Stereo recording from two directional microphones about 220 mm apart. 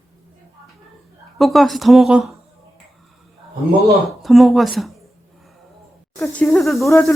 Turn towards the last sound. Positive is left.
turn(degrees=0)  # may be behind; listen again after turning